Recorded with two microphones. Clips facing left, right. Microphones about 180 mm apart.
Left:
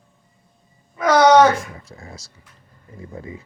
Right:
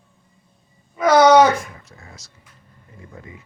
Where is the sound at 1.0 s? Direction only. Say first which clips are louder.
Right 1 dB; 10° right (ahead or behind).